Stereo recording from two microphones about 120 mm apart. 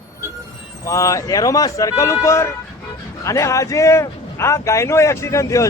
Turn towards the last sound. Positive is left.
turn(degrees=25)  # may be behind; listen again after turning